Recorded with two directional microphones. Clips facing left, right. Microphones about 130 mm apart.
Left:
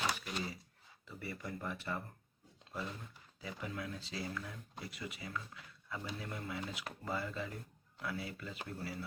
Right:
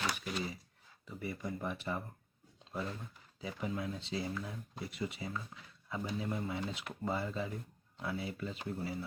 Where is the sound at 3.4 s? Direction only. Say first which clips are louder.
Right 4 dB; 25° right (ahead or behind).